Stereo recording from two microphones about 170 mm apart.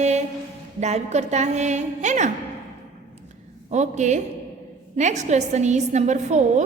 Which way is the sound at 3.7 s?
45° right (ahead or behind).